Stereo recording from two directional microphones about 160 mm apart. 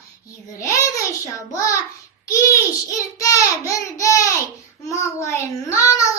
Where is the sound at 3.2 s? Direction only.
20° left (ahead or behind).